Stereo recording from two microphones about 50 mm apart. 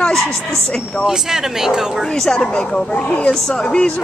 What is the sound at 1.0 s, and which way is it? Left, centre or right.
Speech, centre.